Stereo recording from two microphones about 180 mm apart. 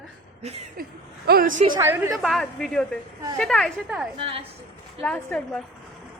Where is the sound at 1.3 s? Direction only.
50° right (ahead or behind).